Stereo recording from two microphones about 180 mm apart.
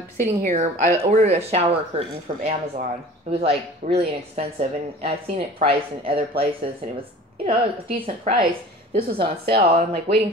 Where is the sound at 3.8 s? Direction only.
40° right (ahead or behind).